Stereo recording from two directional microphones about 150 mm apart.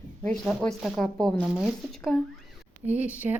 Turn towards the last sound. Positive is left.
turn(degrees=-10)  # may be behind; listen again after turning